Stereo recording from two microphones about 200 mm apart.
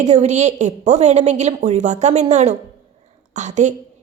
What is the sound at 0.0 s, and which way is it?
A woman's voice, 35° right (ahead or behind).